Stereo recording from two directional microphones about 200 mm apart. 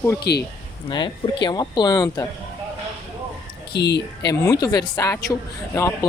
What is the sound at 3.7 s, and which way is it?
Speech, 55° left (ahead or behind).